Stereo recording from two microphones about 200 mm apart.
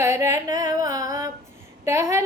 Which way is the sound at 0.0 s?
15° right (ahead or behind).